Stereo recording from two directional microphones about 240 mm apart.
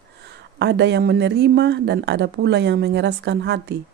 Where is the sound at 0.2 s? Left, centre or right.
Right.